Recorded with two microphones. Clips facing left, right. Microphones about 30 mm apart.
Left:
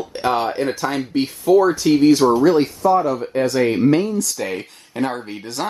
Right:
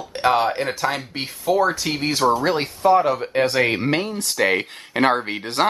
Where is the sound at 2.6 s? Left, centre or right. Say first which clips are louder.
Even; right.